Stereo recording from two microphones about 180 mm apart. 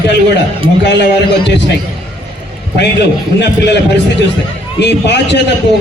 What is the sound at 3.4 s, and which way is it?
A man's voice, 70° left (ahead or behind).